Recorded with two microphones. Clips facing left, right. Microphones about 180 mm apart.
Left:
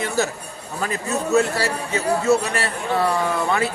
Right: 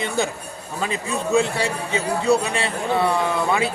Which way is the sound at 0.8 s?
15° right (ahead or behind).